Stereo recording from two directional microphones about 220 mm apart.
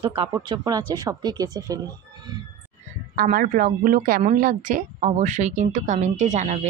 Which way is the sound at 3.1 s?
40° right (ahead or behind).